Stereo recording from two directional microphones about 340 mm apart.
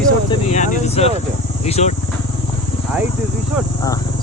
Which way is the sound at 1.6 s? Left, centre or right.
Centre.